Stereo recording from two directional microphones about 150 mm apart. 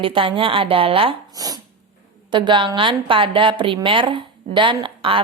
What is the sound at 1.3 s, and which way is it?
Speech, 25° right (ahead or behind).